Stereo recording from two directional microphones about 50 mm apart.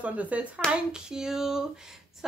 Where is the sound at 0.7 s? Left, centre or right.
Centre.